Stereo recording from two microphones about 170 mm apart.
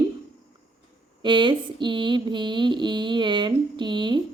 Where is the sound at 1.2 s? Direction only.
30° right (ahead or behind).